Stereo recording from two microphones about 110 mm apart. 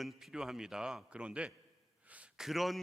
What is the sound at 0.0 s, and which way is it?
A man's voice, centre (ahead or behind).